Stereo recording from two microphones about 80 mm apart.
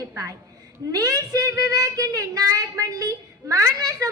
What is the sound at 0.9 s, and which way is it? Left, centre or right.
A woman's voice, right.